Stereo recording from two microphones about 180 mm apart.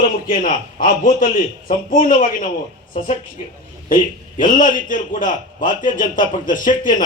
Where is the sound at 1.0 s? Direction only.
50° left (ahead or behind).